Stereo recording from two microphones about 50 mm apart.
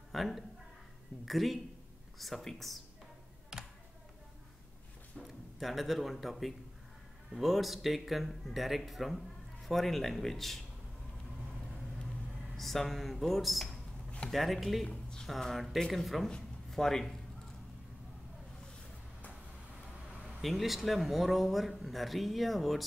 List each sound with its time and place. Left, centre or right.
0.1 s a woman's voice: centre
3.5 s computer keyboard: centre
5.2 s speech: centre
12.5 s speech: centre
14.9 s speech: centre
15.2 s a man's voice: centre
20.4 s speech: centre